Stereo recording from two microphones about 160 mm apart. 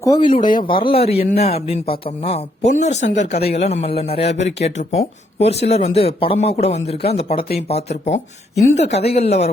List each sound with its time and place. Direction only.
0.0 s a man's voice: 25° left (ahead or behind); by 9.5 s 40° left (ahead or behind)